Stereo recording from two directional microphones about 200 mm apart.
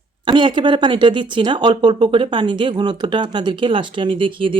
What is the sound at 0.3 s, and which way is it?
Speech, 25° right (ahead or behind).